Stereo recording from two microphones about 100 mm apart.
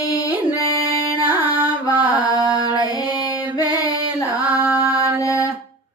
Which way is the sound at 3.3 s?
45° left (ahead or behind).